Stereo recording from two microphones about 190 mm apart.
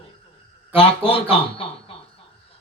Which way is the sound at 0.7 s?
30° left (ahead or behind).